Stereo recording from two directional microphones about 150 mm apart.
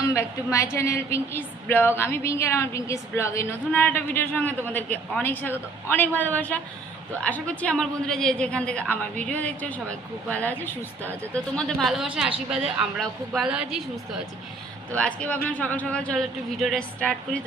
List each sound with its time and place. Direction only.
0.0 s a woman's voice: 20° left (ahead or behind)
11.5 s a woman's voice: centre (ahead or behind)
14.9 s a woman's voice: 10° left (ahead or behind)